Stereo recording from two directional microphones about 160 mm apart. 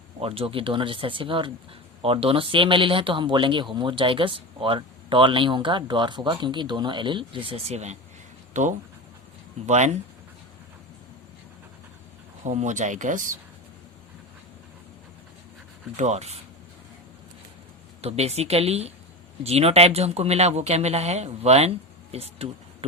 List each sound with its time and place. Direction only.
0.2 s speech: 35° right (ahead or behind)
12.5 s speech: 50° right (ahead or behind)
16.0 s speech: 45° right (ahead or behind)
18.0 s speech: 40° right (ahead or behind)